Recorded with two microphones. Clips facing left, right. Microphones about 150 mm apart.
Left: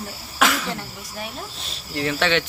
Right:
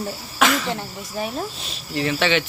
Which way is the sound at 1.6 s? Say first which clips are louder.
Left 1 dB; centre (ahead or behind).